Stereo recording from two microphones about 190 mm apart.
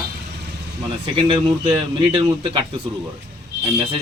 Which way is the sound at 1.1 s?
30° right (ahead or behind).